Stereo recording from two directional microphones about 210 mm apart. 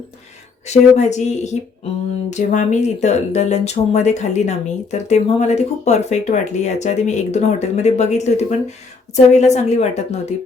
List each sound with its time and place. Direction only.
0.7 s speech: 30° left (ahead or behind)